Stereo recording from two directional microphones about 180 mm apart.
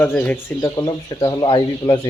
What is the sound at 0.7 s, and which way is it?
Speech, 25° left (ahead or behind).